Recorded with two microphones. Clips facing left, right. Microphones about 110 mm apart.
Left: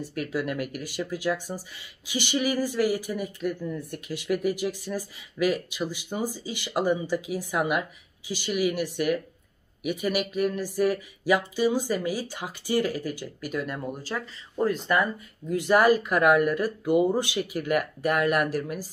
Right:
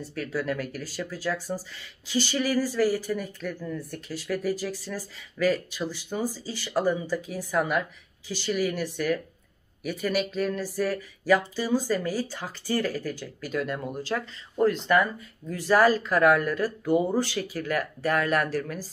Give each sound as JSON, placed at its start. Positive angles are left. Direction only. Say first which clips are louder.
{"t": 0.0, "sound": "speech", "louder": "left 1 dB", "side_deg": 15}